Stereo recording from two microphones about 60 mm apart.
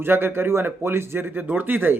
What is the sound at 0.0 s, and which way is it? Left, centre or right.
A man's voice, right.